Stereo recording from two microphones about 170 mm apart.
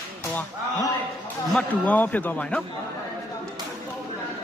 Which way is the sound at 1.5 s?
10° left (ahead or behind).